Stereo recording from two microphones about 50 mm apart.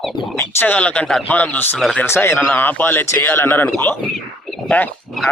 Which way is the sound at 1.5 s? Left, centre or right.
Left.